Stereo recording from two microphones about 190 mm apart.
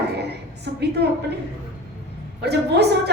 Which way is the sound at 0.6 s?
60° right (ahead or behind).